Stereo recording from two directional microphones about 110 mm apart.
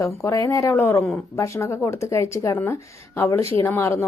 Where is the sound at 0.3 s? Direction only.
30° left (ahead or behind).